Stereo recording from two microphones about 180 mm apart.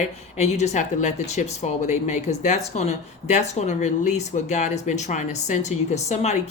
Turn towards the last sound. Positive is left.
turn(degrees=40)  # may be behind; listen again after turning